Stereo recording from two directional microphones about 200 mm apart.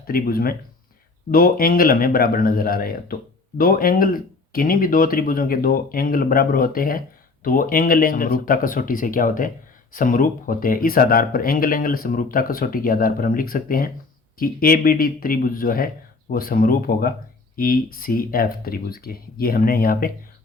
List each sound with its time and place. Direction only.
0.1 s speech: 50° left (ahead or behind)